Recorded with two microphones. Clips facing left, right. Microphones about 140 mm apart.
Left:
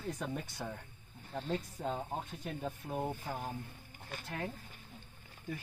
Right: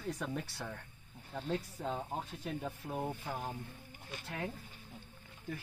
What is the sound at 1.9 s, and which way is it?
Speech, centre (ahead or behind).